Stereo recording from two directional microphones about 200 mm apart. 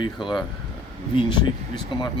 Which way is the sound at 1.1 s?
25° left (ahead or behind).